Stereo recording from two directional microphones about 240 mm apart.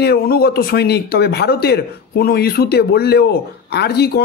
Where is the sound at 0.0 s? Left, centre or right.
Left.